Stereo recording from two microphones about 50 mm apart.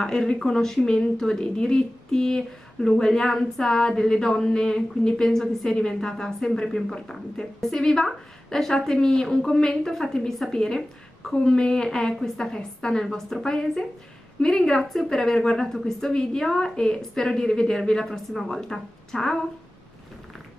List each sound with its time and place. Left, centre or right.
0.0 s a woman's voice: centre
14.8 s a woman's voice: centre